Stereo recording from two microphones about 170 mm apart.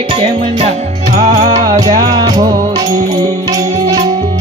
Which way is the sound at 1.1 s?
45° right (ahead or behind).